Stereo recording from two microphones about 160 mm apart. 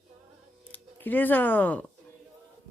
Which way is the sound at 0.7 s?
10° left (ahead or behind).